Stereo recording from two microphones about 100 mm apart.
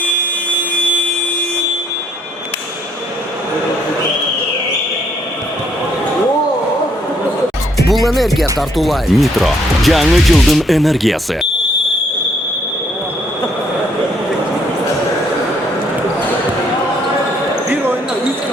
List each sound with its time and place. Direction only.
7.9 s music: centre (ahead or behind)
8.8 s speech: centre (ahead or behind)